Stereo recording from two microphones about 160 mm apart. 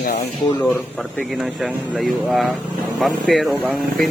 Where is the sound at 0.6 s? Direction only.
10° left (ahead or behind); by 4.1 s 5° right (ahead or behind).